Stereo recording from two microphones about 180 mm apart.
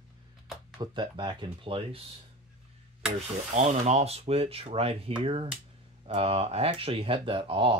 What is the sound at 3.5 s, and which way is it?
Speech, 35° right (ahead or behind).